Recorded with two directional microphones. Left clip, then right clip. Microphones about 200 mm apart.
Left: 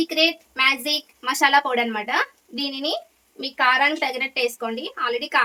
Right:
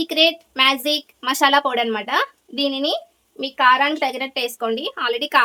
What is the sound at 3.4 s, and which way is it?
A woman's voice, 25° right (ahead or behind).